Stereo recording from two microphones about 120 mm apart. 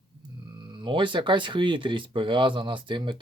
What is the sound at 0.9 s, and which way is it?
Speech, 45° right (ahead or behind).